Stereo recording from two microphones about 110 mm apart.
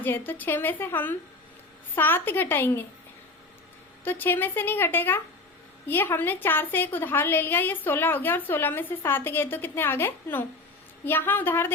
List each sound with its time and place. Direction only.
0.0 s a woman's voice: 20° left (ahead or behind)
4.0 s a woman's voice: 20° left (ahead or behind)